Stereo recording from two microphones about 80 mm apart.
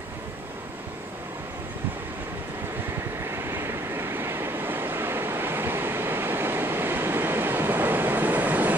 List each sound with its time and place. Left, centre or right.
3.3 s vehicle: right